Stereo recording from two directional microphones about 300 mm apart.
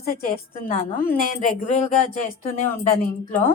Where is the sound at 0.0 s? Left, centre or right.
Left.